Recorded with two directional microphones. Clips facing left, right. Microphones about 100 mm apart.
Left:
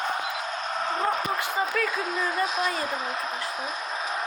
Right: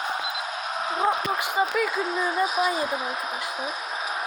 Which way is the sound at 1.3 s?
15° right (ahead or behind).